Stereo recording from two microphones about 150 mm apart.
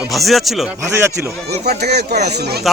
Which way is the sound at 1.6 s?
90° right.